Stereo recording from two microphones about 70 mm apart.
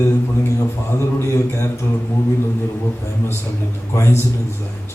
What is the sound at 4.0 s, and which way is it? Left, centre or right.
Speech, left.